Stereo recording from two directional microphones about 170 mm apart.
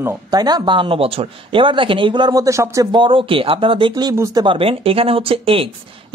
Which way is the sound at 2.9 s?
30° right (ahead or behind).